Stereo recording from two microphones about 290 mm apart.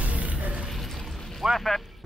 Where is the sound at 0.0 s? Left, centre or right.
Centre.